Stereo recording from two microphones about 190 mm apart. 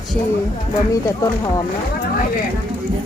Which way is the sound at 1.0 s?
15° left (ahead or behind).